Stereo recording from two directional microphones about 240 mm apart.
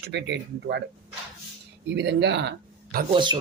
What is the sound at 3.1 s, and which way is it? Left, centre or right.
Speech, centre.